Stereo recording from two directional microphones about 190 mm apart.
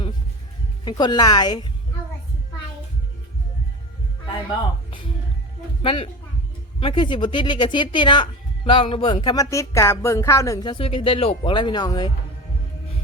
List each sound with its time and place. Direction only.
0.9 s speech: 20° left (ahead or behind)
5.8 s speech: 25° left (ahead or behind)